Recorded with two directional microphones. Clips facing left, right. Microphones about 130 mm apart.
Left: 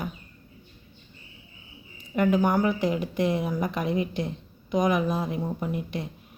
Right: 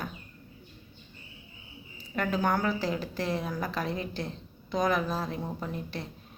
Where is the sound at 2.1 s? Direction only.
15° left (ahead or behind).